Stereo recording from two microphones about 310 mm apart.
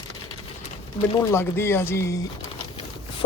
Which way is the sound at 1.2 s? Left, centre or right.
Centre.